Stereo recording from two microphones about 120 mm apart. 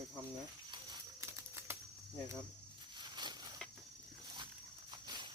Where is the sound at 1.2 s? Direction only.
20° right (ahead or behind).